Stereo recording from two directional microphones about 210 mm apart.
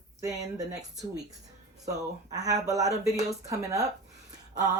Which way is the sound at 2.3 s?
15° right (ahead or behind).